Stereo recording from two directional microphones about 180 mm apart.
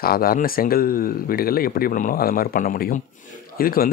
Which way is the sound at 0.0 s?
55° left (ahead or behind).